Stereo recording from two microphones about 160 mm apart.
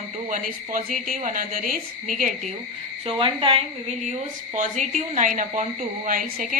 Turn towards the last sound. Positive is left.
turn(degrees=-55)  # may be behind; listen again after turning